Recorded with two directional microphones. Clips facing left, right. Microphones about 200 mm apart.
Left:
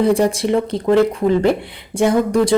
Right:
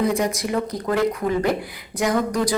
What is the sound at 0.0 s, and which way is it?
Speech, 30° left (ahead or behind).